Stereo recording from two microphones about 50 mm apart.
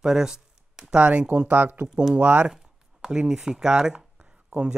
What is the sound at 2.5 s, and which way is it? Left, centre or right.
Speech, centre.